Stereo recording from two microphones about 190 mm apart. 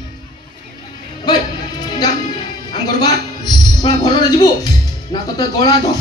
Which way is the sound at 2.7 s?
20° left (ahead or behind).